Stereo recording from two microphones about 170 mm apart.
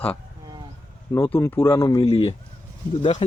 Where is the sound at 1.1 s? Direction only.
15° left (ahead or behind).